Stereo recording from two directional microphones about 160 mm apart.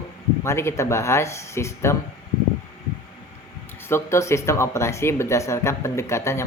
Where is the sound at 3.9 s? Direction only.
15° left (ahead or behind).